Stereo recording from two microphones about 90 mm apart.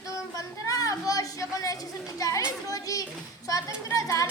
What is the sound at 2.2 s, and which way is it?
Speech, 35° left (ahead or behind).